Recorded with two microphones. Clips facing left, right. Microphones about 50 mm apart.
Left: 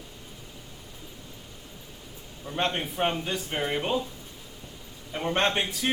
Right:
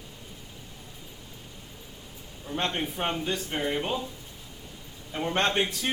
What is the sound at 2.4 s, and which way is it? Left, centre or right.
A man's voice, centre.